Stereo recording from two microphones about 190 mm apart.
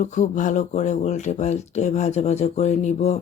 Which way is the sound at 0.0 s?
40° left (ahead or behind).